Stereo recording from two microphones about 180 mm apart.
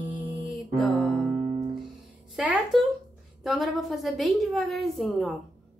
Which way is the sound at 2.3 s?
5° right (ahead or behind).